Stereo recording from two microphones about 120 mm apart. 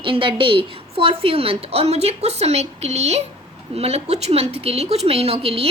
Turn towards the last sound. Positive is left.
turn(degrees=-55)  # may be behind; listen again after turning